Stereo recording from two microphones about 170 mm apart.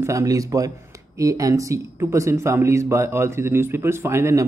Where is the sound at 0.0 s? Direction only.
20° right (ahead or behind).